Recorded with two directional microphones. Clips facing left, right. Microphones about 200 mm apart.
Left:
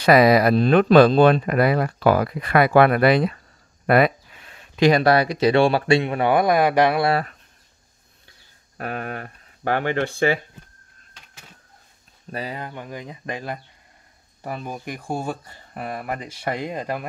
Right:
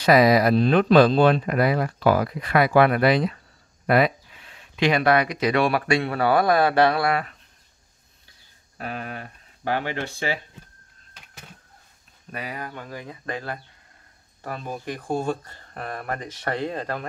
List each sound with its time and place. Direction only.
0.0 s speech: 60° left (ahead or behind); by 7.1 s 15° left (ahead or behind)
8.7 s speech: 55° left (ahead or behind)
12.3 s speech: 30° left (ahead or behind); by 17.0 s 15° left (ahead or behind)